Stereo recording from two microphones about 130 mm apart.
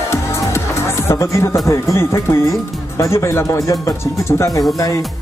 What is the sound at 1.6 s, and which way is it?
Speech, 20° left (ahead or behind).